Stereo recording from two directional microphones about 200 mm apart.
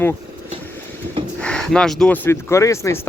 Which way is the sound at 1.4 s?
5° left (ahead or behind).